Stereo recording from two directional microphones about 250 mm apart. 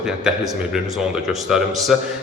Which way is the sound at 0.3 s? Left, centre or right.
Centre.